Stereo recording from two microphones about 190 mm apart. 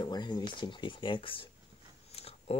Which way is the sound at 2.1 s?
30° left (ahead or behind).